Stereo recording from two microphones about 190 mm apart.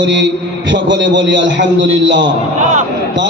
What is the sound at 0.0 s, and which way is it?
A man's voice, 70° right (ahead or behind).